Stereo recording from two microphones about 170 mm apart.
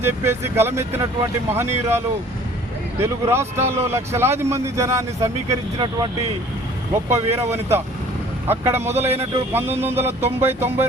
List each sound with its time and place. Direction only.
0.0 s speech: 15° right (ahead or behind)
3.0 s speech: 15° right (ahead or behind)
7.1 s speech: 15° right (ahead or behind)
9.0 s speech: 35° right (ahead or behind)
9.8 s speech: 15° right (ahead or behind)